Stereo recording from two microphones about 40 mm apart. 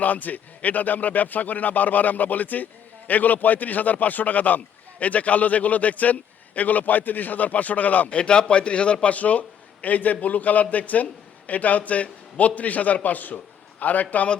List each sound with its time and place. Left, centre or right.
0.0 s a man's voice: left
8.1 s a man's voice: left